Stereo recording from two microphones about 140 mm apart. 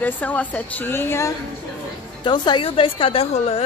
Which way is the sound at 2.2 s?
30° left (ahead or behind).